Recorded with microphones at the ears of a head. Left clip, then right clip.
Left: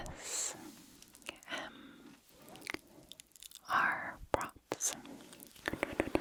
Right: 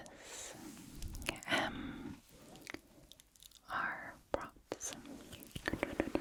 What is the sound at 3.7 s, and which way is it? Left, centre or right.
Whispering, left.